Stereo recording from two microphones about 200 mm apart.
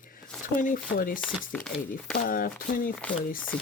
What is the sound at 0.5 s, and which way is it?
Speech, 45° left (ahead or behind).